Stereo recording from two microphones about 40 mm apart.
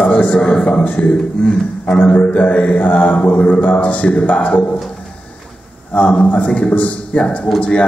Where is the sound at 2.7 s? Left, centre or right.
Left.